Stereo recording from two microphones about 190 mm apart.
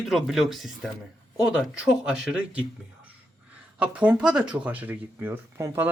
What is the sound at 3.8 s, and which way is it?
Speech, 5° right (ahead or behind).